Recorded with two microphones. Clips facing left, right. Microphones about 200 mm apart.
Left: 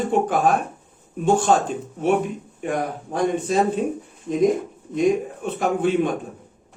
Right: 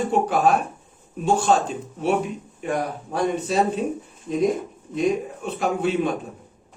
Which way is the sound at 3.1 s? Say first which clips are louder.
Left 1 dB; 50° left (ahead or behind).